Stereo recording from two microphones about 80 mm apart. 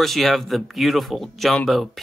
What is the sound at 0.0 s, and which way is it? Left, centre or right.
Speech, centre.